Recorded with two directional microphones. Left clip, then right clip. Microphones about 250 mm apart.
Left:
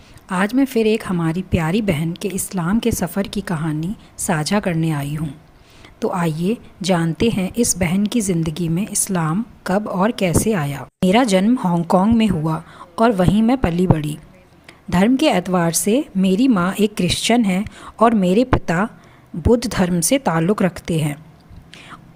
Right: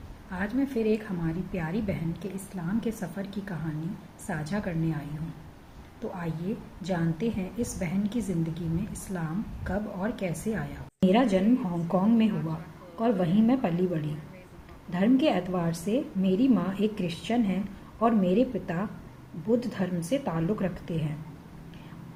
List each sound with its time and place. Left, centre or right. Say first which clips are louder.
0.3 s a woman's voice: left 12 dB; left